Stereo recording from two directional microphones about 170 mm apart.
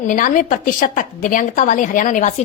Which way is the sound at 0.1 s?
50° left (ahead or behind).